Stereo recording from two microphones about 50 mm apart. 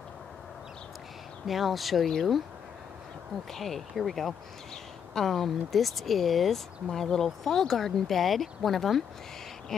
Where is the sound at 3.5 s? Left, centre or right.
Centre.